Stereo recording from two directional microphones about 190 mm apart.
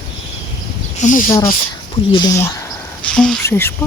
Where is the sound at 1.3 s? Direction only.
15° left (ahead or behind).